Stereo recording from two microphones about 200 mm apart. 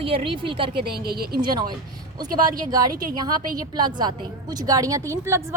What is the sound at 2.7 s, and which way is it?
A woman's voice, 20° right (ahead or behind).